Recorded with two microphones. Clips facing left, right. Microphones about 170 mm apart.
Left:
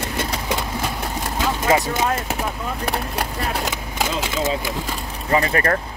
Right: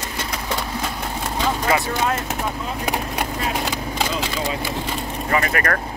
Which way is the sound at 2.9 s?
Centre (ahead or behind).